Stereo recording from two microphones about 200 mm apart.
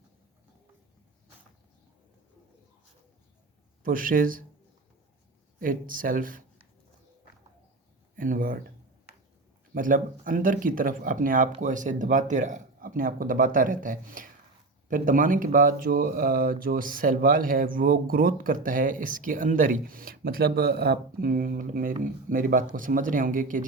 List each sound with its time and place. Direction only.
3.8 s speech: 45° right (ahead or behind)
5.5 s speech: 45° right (ahead or behind)
8.1 s speech: 45° right (ahead or behind)
9.7 s speech: 40° right (ahead or behind)